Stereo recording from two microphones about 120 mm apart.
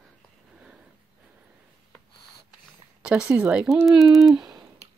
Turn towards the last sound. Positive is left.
turn(degrees=-5)  # may be behind; listen again after turning